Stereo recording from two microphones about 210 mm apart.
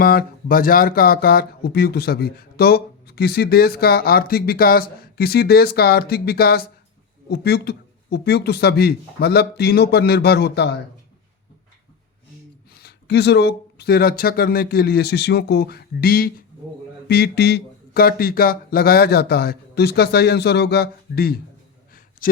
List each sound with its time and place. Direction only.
0.0 s speech: 45° left (ahead or behind)
12.8 s speech: 55° left (ahead or behind)
22.2 s a sound: 40° left (ahead or behind)